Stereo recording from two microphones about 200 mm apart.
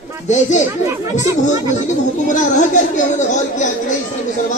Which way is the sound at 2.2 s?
40° left (ahead or behind).